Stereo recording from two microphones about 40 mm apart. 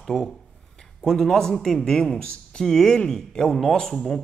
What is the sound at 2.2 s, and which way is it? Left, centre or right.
Speech, left.